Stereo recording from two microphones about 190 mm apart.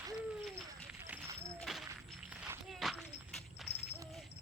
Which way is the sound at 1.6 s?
Centre (ahead or behind).